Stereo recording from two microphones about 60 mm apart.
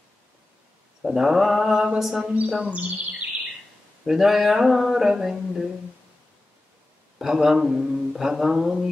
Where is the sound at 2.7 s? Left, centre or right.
Right.